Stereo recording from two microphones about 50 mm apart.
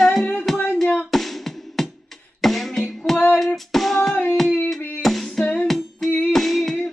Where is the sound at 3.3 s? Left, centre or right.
Centre.